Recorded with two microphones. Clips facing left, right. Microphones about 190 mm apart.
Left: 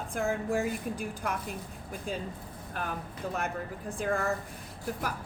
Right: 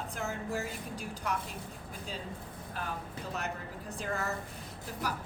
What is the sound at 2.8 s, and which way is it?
A woman's voice, 55° left (ahead or behind).